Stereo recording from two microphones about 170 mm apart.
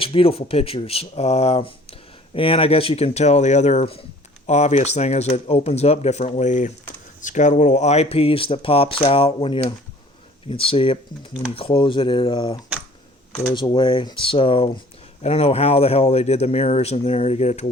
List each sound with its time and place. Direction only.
0.0 s speech: 35° left (ahead or behind)